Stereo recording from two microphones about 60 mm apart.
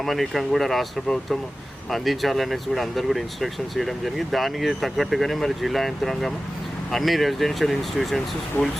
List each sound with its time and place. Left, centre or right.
0.0 s speech: centre